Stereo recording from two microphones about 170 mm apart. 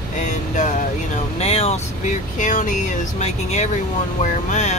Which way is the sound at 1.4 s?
35° left (ahead or behind).